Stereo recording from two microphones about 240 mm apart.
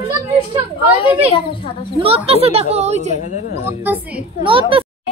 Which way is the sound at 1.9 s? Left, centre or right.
Right.